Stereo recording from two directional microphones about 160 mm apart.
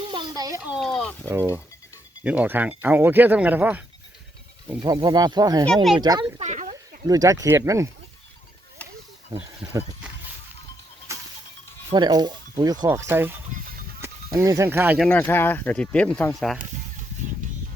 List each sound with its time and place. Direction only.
0.1 s a sound: 25° right (ahead or behind)
0.7 s speech: centre (ahead or behind)
1.2 s speech: 15° right (ahead or behind)
4.8 s speech: 25° right (ahead or behind)
5.6 s speech: centre (ahead or behind)
6.0 s speech: 25° right (ahead or behind)
6.4 s a sound: 50° right (ahead or behind)
7.0 s speech: 20° right (ahead or behind)
11.1 s a sound: 20° right (ahead or behind)
11.9 s speech: 25° right (ahead or behind)
12.9 s speech: 15° right (ahead or behind)
13.5 s music: 60° right (ahead or behind)
14.0 s speech: 20° right (ahead or behind)
14.9 s speech: 5° left (ahead or behind)